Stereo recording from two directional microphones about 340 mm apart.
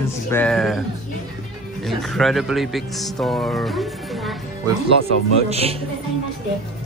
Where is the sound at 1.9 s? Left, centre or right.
Centre.